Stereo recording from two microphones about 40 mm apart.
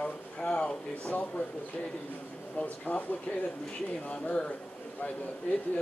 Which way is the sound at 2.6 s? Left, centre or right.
Left.